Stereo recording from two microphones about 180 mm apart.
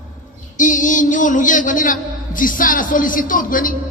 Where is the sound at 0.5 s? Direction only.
45° left (ahead or behind).